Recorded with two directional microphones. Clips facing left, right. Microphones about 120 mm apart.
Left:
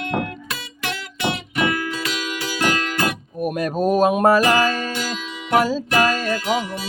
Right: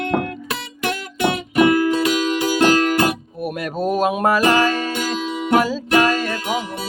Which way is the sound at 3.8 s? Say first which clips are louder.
Left 2 dB; 45° left (ahead or behind).